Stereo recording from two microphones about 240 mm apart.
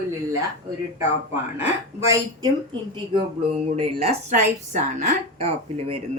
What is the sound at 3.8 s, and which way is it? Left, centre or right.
Speech, right.